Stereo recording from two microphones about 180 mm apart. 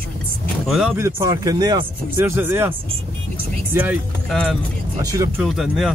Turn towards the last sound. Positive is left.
turn(degrees=0)  # may be behind; listen again after turning